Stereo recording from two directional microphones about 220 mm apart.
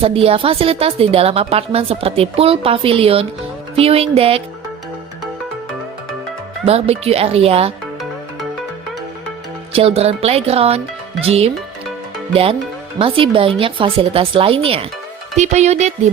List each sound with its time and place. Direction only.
0.0 s speech: 25° right (ahead or behind)
6.7 s speech: 25° right (ahead or behind)
9.7 s speech: 25° right (ahead or behind)